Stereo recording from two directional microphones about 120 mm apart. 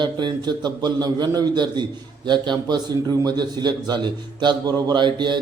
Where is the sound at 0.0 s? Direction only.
40° right (ahead or behind).